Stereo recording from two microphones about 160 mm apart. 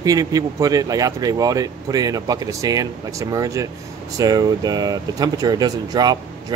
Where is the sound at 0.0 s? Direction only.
25° right (ahead or behind).